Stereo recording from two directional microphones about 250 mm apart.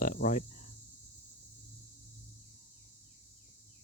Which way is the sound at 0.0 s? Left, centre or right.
Left.